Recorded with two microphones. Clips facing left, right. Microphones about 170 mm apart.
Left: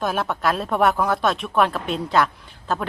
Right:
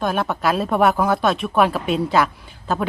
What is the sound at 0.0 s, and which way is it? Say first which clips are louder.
Speech: right 2 dB; centre (ahead or behind).